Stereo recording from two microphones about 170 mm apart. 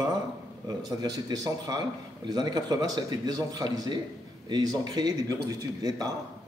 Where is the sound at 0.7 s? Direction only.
20° right (ahead or behind).